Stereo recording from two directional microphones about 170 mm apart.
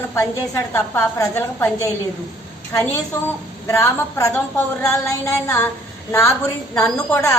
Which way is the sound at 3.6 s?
15° left (ahead or behind).